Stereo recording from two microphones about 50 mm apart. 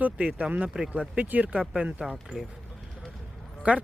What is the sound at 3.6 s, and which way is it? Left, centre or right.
Speech, right.